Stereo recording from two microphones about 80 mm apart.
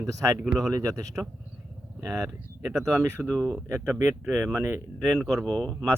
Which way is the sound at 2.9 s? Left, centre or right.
Right.